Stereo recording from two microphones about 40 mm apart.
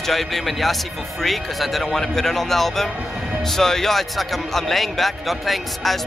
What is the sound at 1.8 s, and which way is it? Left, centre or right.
Speech, centre.